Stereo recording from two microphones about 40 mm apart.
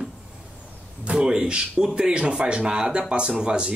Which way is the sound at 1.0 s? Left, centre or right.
Right.